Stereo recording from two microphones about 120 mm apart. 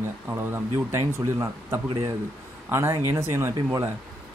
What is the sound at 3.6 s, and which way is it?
Speech, 35° right (ahead or behind).